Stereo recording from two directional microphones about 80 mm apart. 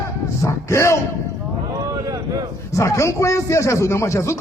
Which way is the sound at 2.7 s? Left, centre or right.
Left.